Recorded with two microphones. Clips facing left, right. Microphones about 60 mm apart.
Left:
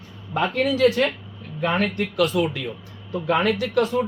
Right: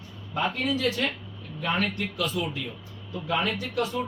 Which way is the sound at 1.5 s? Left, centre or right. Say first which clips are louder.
Left 5 dB; left.